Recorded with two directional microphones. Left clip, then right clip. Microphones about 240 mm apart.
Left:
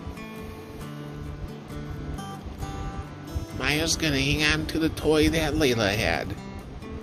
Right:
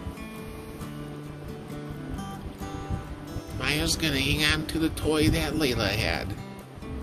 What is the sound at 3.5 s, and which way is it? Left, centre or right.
Speech, left.